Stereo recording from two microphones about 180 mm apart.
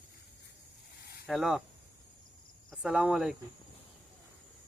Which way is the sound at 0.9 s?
60° left (ahead or behind).